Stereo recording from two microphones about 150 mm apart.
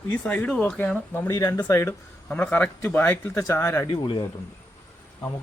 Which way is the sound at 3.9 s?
30° left (ahead or behind).